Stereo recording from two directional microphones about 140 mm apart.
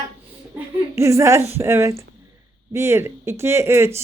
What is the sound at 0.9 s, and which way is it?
Speech, 20° right (ahead or behind).